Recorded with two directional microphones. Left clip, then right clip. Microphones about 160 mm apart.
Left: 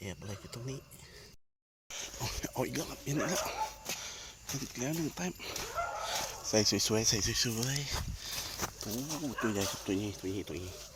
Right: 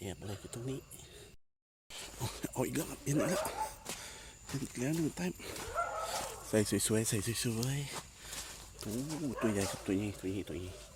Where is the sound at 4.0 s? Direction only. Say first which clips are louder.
Left 5 dB; 35° right (ahead or behind).